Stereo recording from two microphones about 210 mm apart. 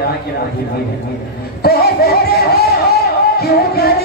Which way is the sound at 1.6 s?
50° left (ahead or behind).